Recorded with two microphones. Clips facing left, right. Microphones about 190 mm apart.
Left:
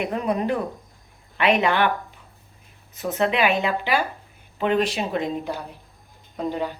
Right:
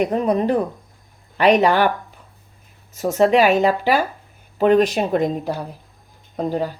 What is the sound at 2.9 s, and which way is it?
Speech, 40° right (ahead or behind).